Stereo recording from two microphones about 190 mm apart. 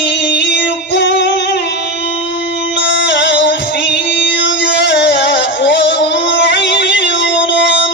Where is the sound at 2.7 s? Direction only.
70° left (ahead or behind).